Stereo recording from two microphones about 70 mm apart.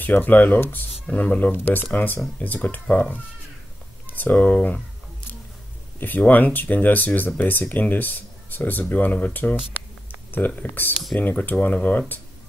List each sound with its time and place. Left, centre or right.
0.0 s speech: left
5.9 s speech: left